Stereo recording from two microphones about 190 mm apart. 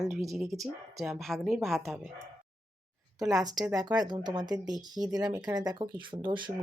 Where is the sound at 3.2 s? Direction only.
20° right (ahead or behind).